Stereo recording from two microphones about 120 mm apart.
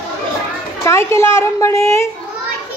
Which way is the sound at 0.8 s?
25° left (ahead or behind).